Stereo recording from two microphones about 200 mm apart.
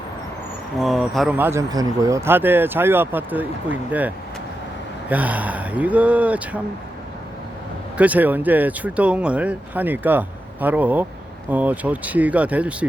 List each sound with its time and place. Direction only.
0.8 s speech: centre (ahead or behind)
1.4 s speech: 15° right (ahead or behind)
7.9 s speech: 5° right (ahead or behind)